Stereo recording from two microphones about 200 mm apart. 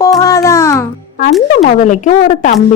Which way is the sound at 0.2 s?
15° left (ahead or behind).